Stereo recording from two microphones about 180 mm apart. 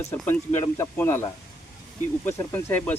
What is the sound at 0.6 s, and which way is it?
Speech, 15° left (ahead or behind).